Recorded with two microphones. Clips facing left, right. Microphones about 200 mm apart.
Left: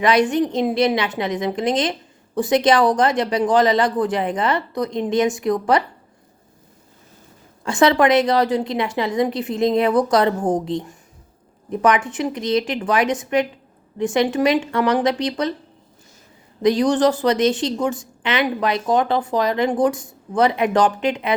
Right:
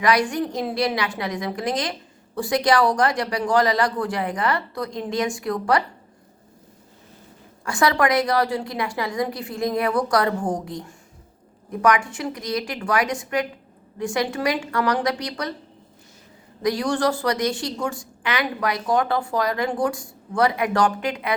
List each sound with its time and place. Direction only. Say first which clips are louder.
0.0 s a woman's voice: left 4 dB; 25° left (ahead or behind)
7.6 s a woman's voice: left 5 dB; 25° left (ahead or behind)
16.6 s a woman's voice: left 6 dB; 20° left (ahead or behind)